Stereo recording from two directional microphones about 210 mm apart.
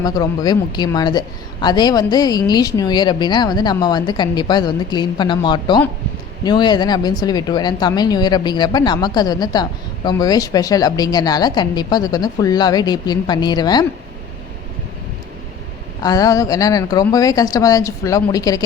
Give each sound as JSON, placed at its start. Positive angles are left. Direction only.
{"t": 0.0, "sound": "speech", "side_deg": 20}
{"t": 16.0, "sound": "speech", "side_deg": 15}